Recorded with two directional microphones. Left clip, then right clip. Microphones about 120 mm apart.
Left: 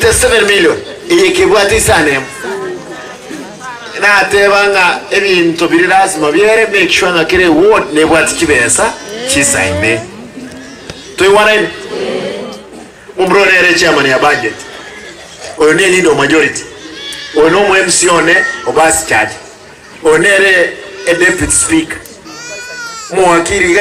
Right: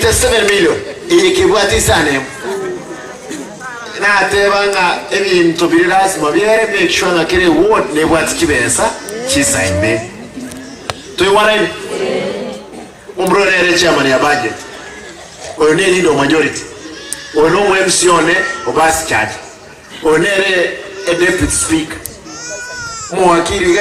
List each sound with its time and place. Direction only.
0.0 s a man's voice: 35° left (ahead or behind)
3.9 s a man's voice: 35° left (ahead or behind)
11.2 s a man's voice: 30° left (ahead or behind)
13.1 s a man's voice: 35° left (ahead or behind)
15.5 s a man's voice: 35° left (ahead or behind)
23.1 s a man's voice: 40° left (ahead or behind)